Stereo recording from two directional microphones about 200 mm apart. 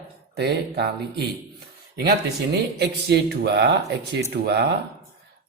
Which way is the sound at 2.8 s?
55° right (ahead or behind).